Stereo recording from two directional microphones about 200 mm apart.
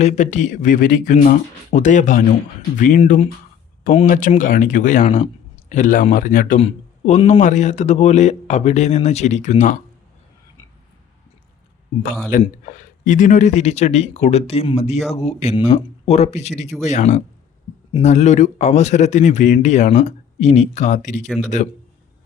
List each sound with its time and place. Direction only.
0.0 s speech: 35° left (ahead or behind)
12.3 s speech: 40° left (ahead or behind)